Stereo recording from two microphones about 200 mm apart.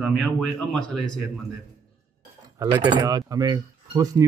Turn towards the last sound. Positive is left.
turn(degrees=-20)  # may be behind; listen again after turning